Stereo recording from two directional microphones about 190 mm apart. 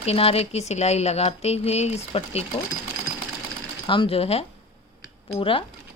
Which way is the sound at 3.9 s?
30° left (ahead or behind).